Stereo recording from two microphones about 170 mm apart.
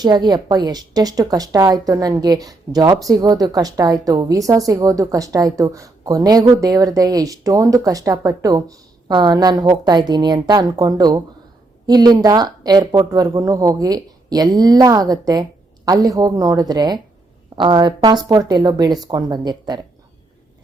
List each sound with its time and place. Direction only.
0.0 s speech: 25° right (ahead or behind)